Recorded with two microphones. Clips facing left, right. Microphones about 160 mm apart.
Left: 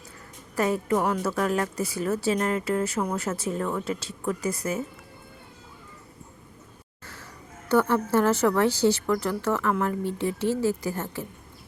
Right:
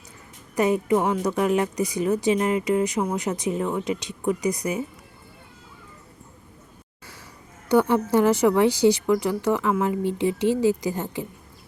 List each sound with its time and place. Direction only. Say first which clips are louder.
0.5 s speech: right 4 dB; 15° right (ahead or behind)
7.0 s a sound: left 1 dB; 10° right (ahead or behind)
7.7 s speech: right 3 dB; 15° right (ahead or behind)